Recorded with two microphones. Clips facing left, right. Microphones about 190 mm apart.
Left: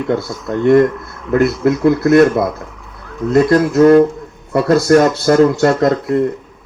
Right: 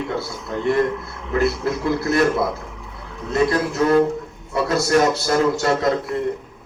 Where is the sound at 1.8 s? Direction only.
55° left (ahead or behind).